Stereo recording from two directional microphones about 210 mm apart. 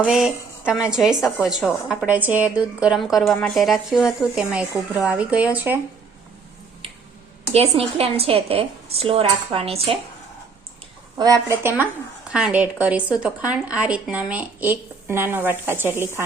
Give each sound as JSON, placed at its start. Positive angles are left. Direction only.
{"t": 0.0, "sound": "a woman's voice", "side_deg": -5}
{"t": 6.8, "sound": "finger snapping", "side_deg": -25}
{"t": 7.5, "sound": "speech", "side_deg": -30}
{"t": 11.2, "sound": "a woman's voice", "side_deg": -15}